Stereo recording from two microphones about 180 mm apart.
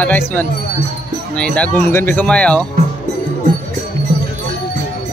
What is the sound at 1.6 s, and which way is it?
Speech, 10° left (ahead or behind).